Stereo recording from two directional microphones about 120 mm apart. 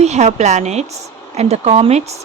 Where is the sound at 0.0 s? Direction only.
65° right (ahead or behind).